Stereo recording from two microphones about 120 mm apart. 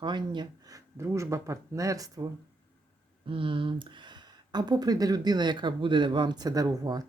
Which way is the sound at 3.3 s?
45° right (ahead or behind).